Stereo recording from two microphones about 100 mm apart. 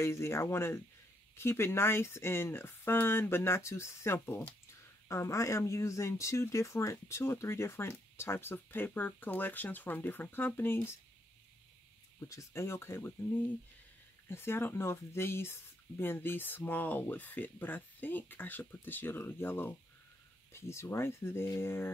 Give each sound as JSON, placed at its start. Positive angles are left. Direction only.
{"t": 0.0, "sound": "speech", "side_deg": 25}
{"t": 12.2, "sound": "speech", "side_deg": 30}